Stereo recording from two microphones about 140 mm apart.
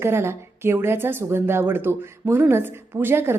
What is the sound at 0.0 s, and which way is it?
A woman's voice, 20° right (ahead or behind).